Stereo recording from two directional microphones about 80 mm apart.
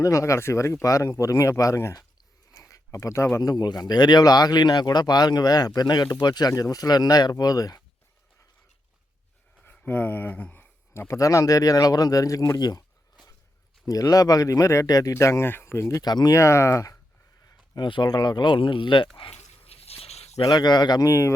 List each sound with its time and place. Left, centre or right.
0.0 s speech: left
2.6 s a sound: left
3.4 s speech: left
6.5 s speech: left
9.8 s speech: left
12.5 s speech: left
13.8 s speech: left
16.0 s speech: left
16.3 s speech: left
17.4 s speech: left
20.4 s speech: left
21.0 s speech: left